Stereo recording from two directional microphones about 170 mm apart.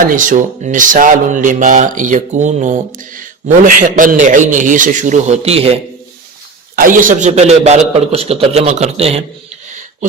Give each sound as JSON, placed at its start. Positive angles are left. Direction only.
{"t": 0.0, "sound": "speech", "side_deg": -50}
{"t": 6.7, "sound": "a man's voice", "side_deg": -50}
{"t": 9.6, "sound": "a sound", "side_deg": -45}